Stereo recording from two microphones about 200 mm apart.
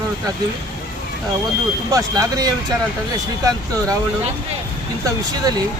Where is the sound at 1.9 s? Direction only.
15° right (ahead or behind).